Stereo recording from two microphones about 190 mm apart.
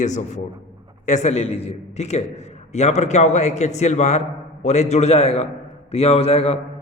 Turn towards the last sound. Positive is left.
turn(degrees=30)  # may be behind; listen again after turning